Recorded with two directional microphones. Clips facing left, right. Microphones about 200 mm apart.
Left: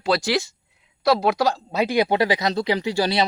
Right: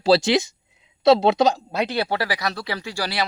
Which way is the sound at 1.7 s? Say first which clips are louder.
Left 4 dB; 10° left (ahead or behind).